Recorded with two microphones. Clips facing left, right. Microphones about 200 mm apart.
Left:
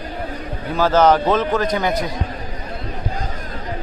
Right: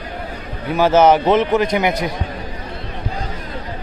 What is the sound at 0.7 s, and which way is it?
Speech, 20° right (ahead or behind).